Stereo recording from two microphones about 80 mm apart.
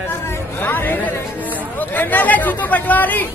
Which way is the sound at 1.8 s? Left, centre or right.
Left.